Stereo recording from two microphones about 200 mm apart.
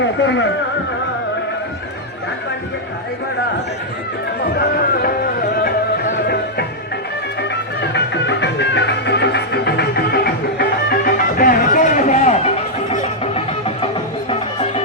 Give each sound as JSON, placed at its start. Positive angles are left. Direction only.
{"t": 0.0, "sound": "speech", "side_deg": 65}
{"t": 5.0, "sound": "music", "side_deg": 45}
{"t": 13.8, "sound": "music", "side_deg": 30}